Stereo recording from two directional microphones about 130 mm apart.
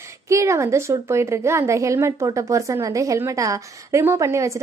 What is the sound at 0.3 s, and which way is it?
A woman's voice, 20° right (ahead or behind).